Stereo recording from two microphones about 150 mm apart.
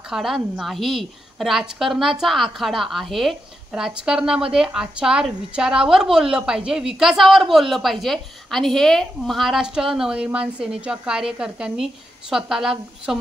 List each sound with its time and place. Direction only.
0.1 s a woman's voice: centre (ahead or behind)